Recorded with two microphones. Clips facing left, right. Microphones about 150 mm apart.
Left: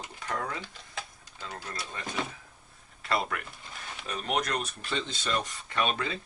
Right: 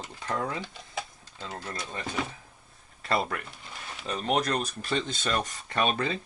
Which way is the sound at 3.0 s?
35° right (ahead or behind).